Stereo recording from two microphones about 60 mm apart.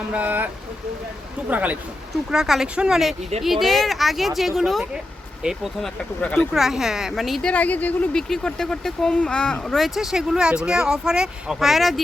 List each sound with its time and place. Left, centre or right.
0.1 s speech: right
2.3 s speech: centre
6.1 s speech: centre
6.5 s speech: centre
7.4 s speech: left
8.1 s speech: centre
9.7 s speech: centre